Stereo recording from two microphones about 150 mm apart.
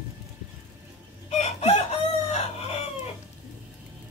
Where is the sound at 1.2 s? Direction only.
50° left (ahead or behind).